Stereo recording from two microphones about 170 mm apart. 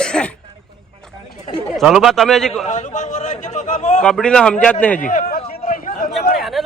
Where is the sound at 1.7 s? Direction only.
Centre (ahead or behind).